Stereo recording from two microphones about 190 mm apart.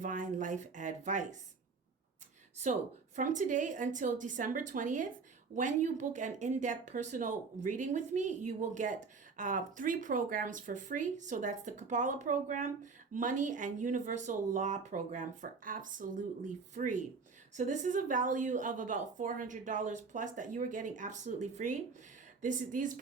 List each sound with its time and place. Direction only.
0.0 s speech: 40° right (ahead or behind)
3.2 s a woman's voice: 40° right (ahead or behind)